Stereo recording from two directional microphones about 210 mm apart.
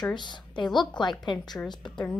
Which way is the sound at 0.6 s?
Centre (ahead or behind).